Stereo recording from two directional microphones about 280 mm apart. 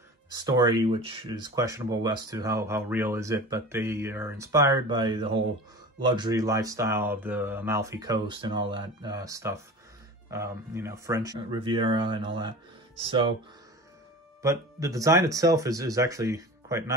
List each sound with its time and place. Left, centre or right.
0.3 s speech: centre
14.4 s speech: centre